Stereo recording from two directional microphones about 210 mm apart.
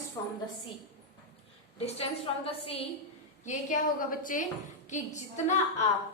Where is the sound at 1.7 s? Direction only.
30° left (ahead or behind).